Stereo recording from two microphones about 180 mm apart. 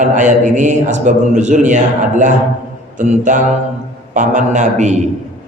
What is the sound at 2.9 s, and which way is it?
A man's voice, 45° right (ahead or behind).